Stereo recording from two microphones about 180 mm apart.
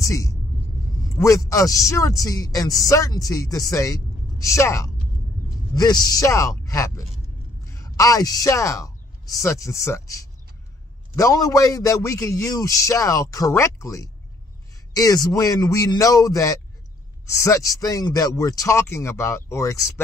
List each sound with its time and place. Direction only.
0.0 s vehicle: 20° left (ahead or behind)
1.1 s a man's voice: 15° left (ahead or behind)